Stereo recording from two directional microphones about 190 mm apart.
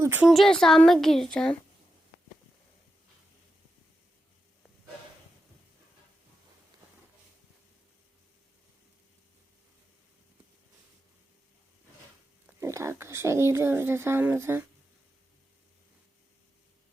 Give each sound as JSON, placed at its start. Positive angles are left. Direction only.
{"t": 0.0, "sound": "a woman's voice", "side_deg": -10}
{"t": 0.3, "sound": "speech", "side_deg": 0}
{"t": 12.5, "sound": "speech", "side_deg": -15}